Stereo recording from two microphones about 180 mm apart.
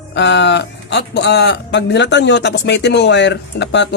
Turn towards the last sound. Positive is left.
turn(degrees=75)  # may be behind; listen again after turning